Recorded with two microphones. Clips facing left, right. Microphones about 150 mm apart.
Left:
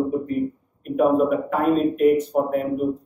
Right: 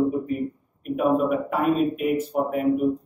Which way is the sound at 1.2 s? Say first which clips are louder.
Left 2 dB; 10° right (ahead or behind).